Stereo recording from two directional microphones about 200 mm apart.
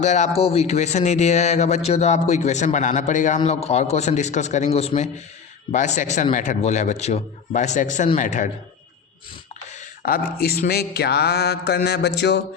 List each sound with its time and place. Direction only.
0.0 s speech: 35° left (ahead or behind)
10.0 s mantra: 50° left (ahead or behind)